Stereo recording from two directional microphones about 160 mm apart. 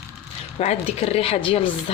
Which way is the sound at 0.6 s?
40° left (ahead or behind).